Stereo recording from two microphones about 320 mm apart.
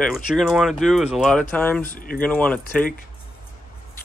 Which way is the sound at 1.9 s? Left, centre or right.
Left.